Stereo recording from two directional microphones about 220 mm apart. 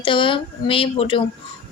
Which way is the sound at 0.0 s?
20° left (ahead or behind).